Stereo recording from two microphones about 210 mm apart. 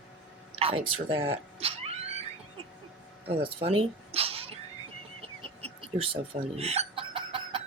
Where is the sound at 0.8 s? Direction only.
25° right (ahead or behind).